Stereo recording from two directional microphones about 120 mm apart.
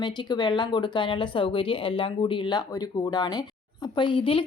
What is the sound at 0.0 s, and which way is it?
Speech, 40° left (ahead or behind).